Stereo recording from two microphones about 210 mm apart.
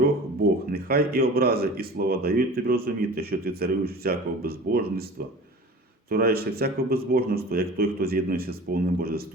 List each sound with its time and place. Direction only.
0.7 s speech: 45° right (ahead or behind)